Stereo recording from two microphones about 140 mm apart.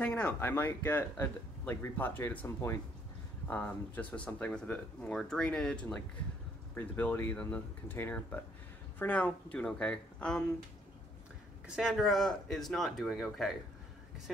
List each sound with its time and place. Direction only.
0.0 s speech: 10° left (ahead or behind)
11.6 s speech: 5° right (ahead or behind)